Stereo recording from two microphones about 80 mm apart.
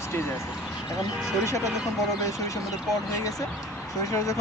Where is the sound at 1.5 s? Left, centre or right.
Left.